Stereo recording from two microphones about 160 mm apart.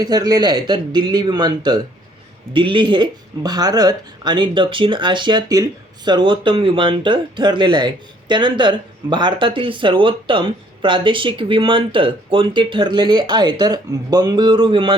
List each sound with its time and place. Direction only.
0.0 s speech: 25° right (ahead or behind)